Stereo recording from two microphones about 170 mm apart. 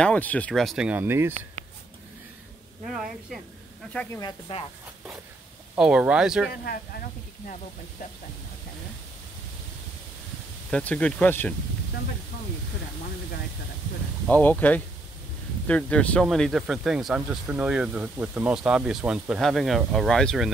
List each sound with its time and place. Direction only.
0.0 s speech: 10° left (ahead or behind); by 1.3 s 15° right (ahead or behind)
2.8 s speech: 5° right (ahead or behind)
4.2 s speech: 25° left (ahead or behind)
5.8 s speech: 5° right (ahead or behind)
6.5 s speech: 60° left (ahead or behind)
10.7 s speech: 10° left (ahead or behind)
14.3 s speech: 10° left (ahead or behind)